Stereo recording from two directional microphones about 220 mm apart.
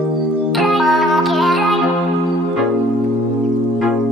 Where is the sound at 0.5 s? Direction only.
Centre (ahead or behind).